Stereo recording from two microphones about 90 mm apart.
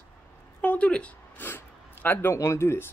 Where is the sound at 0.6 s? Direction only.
15° left (ahead or behind).